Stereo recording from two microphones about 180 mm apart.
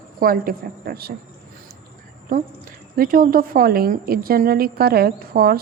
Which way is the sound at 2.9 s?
55° right (ahead or behind).